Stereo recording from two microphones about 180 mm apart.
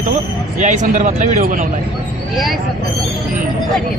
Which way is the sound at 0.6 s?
45° right (ahead or behind).